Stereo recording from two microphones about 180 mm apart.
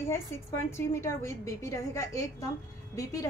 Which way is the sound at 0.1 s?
15° left (ahead or behind).